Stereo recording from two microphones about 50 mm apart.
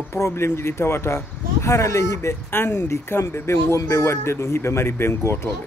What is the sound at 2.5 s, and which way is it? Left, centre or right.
Speech, left.